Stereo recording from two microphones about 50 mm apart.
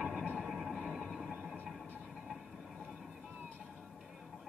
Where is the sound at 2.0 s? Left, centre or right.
Centre.